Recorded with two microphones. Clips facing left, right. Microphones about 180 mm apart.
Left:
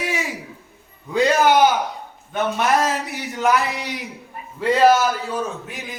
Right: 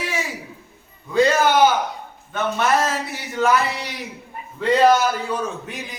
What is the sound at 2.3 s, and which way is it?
Speech, 15° left (ahead or behind).